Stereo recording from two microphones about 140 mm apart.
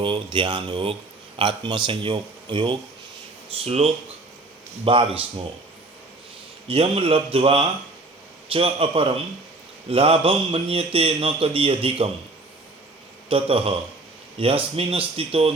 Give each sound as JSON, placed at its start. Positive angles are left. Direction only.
{"t": 0.0, "sound": "a man's voice", "side_deg": -35}
{"t": 3.5, "sound": "a man's voice", "side_deg": -45}
{"t": 6.7, "sound": "a man's voice", "side_deg": -45}
{"t": 13.3, "sound": "speech", "side_deg": -40}